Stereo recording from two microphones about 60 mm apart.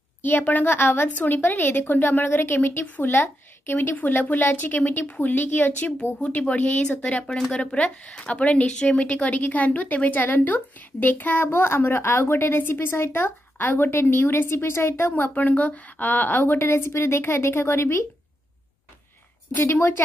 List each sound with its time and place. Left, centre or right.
0.2 s a woman's voice: left
11.4 s a woman's voice: left
15.3 s a woman's voice: left
16.5 s a woman's voice: left
19.6 s a woman's voice: left